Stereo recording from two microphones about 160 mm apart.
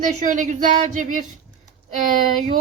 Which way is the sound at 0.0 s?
55° right (ahead or behind).